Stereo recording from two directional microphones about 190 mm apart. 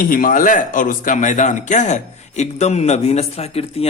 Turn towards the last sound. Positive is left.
turn(degrees=30)  # may be behind; listen again after turning